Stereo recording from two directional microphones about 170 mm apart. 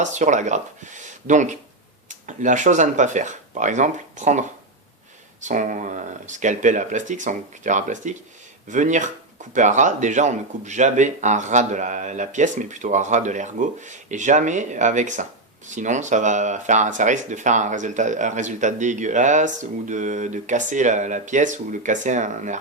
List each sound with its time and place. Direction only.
0.0 s speech: 45° right (ahead or behind)